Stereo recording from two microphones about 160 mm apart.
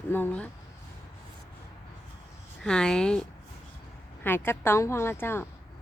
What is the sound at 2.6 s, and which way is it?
A woman's voice, 5° left (ahead or behind).